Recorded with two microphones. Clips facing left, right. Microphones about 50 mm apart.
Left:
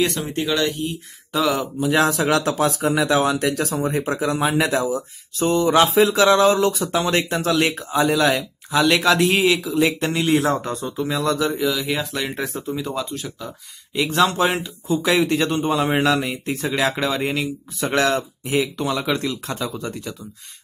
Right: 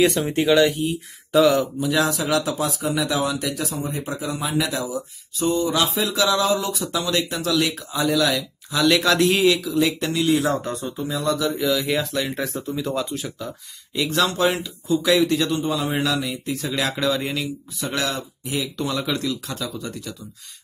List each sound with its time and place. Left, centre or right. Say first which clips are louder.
0.0 s speech: right 3 dB; centre
1.8 s a man's voice: left 3 dB; left
8.7 s speech: left 1 dB; centre; by 10.9 s left
10.9 s speech: left 3 dB; left
11.6 s speech: right 1 dB; centre
12.7 s speech: right 1 dB; centre
13.9 s a man's voice: left 3 dB; centre; by 16.8 s left
16.9 s speech: left 1 dB; left
17.7 s a man's voice: left 7 dB; left